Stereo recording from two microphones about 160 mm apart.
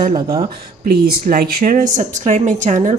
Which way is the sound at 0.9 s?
70° right (ahead or behind).